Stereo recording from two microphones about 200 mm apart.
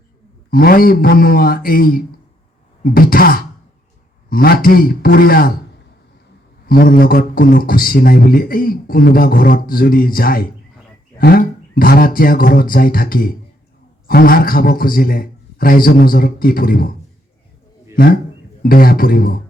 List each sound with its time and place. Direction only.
0.5 s a man's voice: 45° left (ahead or behind)
6.7 s a man's voice: 45° left (ahead or behind)
17.9 s a man's voice: 45° left (ahead or behind)